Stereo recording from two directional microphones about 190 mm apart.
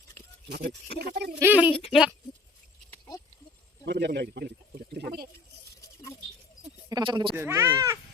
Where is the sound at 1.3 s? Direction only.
10° right (ahead or behind).